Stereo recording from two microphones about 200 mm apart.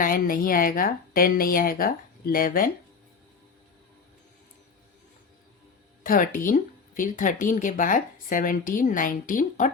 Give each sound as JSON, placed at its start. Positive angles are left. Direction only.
{"t": 0.0, "sound": "a woman's voice", "side_deg": 45}
{"t": 6.0, "sound": "speech", "side_deg": 45}